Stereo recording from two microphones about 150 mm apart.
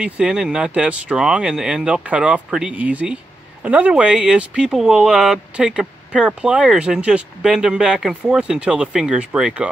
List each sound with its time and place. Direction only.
0.0 s speech: 5° right (ahead or behind)